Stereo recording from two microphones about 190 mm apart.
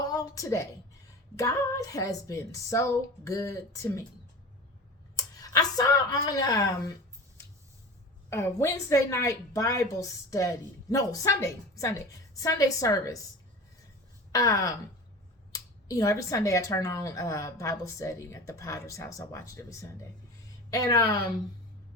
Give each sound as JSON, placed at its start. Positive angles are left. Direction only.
{"t": 0.0, "sound": "a sound", "side_deg": 20}
{"t": 1.4, "sound": "a woman's voice", "side_deg": 20}
{"t": 5.1, "sound": "speech", "side_deg": 20}
{"t": 8.3, "sound": "a woman's voice", "side_deg": 15}
{"t": 14.3, "sound": "a woman's voice", "side_deg": 20}